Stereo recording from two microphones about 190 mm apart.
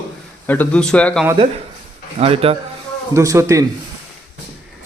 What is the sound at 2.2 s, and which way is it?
Speech, 30° right (ahead or behind).